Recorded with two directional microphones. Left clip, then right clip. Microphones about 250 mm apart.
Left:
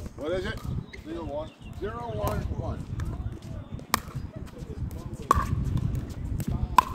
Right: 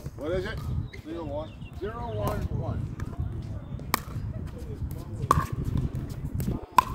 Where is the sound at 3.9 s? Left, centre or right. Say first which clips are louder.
Left 1 dB; centre.